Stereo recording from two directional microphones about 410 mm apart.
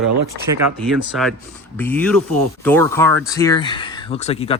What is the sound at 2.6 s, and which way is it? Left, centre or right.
Speech, centre.